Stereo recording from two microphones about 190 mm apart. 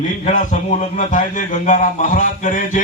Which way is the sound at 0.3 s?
40° left (ahead or behind).